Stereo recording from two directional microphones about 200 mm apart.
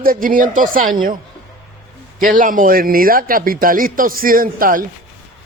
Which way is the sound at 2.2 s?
40° right (ahead or behind).